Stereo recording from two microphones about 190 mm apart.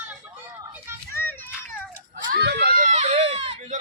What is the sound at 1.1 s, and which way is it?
Children playing, 10° left (ahead or behind).